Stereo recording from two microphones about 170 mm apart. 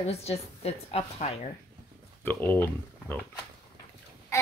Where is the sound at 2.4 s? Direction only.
10° left (ahead or behind).